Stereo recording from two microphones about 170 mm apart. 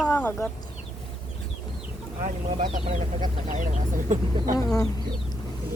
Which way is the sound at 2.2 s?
40° right (ahead or behind).